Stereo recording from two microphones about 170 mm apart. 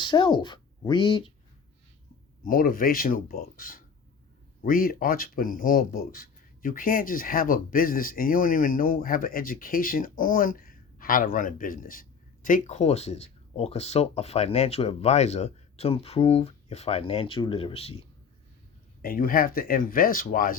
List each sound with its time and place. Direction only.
0.0 s speech: 25° left (ahead or behind)
2.4 s speech: 55° left (ahead or behind); by 17.9 s 35° left (ahead or behind)
19.0 s speech: 60° left (ahead or behind)